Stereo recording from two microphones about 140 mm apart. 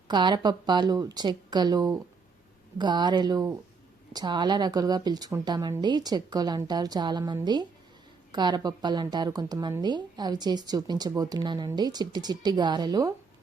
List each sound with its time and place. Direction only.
0.1 s speech: 30° right (ahead or behind)